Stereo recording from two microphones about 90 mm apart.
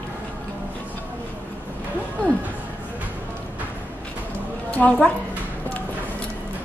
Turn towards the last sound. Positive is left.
turn(degrees=15)  # may be behind; listen again after turning